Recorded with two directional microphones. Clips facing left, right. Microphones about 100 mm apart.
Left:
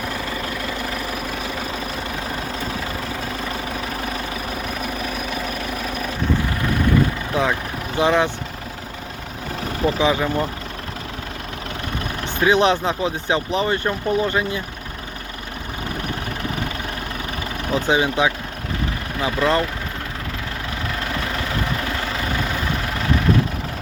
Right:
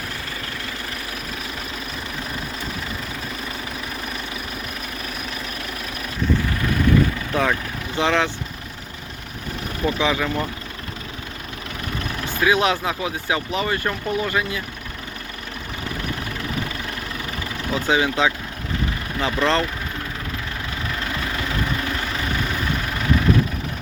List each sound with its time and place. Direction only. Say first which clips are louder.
7.9 s speech: left 3 dB; 15° left (ahead or behind)
9.8 s speech: left 3 dB; 25° left (ahead or behind)
12.2 s speech: left 3 dB; 25° left (ahead or behind)
17.7 s speech: left 1 dB; 20° left (ahead or behind)